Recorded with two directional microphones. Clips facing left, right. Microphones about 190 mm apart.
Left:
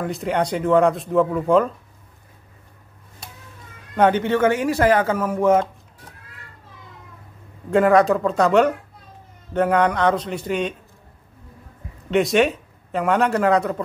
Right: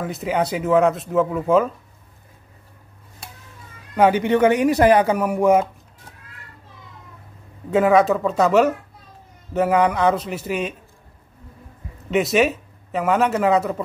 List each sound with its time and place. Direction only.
0.0 s speech: 5° right (ahead or behind)
3.9 s speech: 10° right (ahead or behind)
7.7 s speech: centre (ahead or behind)
12.1 s speech: 5° right (ahead or behind)